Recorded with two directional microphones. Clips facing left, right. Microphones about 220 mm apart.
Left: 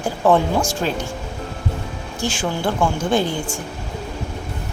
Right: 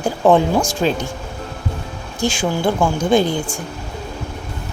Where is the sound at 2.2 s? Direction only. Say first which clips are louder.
Right 4 dB; 15° right (ahead or behind).